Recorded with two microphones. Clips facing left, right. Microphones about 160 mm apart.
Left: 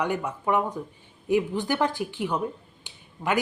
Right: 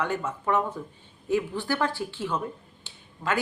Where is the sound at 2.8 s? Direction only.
15° left (ahead or behind).